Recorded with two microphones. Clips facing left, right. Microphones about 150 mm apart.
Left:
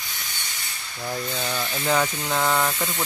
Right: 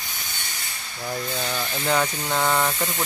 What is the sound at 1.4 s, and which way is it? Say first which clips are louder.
Speech: even; centre (ahead or behind).